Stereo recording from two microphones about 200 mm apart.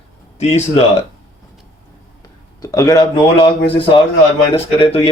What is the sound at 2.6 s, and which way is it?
Speech, 15° left (ahead or behind).